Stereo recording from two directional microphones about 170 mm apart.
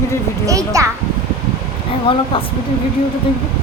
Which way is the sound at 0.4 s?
20° right (ahead or behind).